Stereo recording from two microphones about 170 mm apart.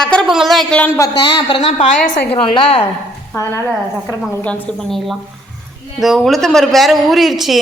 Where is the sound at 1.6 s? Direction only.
45° left (ahead or behind).